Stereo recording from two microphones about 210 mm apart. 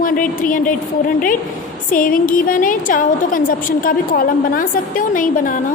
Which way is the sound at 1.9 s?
40° left (ahead or behind).